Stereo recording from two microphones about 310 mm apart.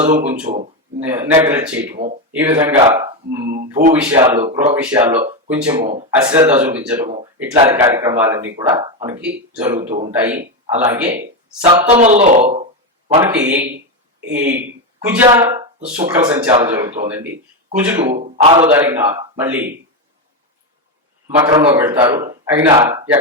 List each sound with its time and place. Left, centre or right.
0.0 s speech: right
1.0 s speech: centre
7.0 s speech: centre
11.6 s speech: centre
13.1 s speech: centre
15.0 s speech: centre
18.2 s a man's voice: right
18.7 s speech: centre
21.2 s speech: centre